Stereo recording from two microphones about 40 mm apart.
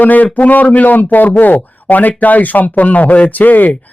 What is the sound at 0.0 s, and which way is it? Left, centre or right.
Speech, left.